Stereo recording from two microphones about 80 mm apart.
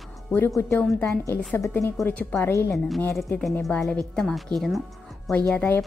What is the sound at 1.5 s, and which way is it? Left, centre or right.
Speech, left.